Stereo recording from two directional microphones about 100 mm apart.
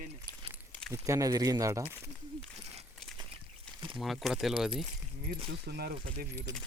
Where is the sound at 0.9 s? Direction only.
30° right (ahead or behind).